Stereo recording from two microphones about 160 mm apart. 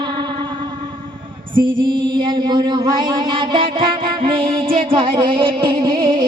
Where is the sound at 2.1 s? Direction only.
25° right (ahead or behind).